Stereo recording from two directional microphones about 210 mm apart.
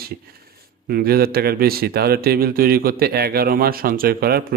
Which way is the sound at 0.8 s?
45° right (ahead or behind).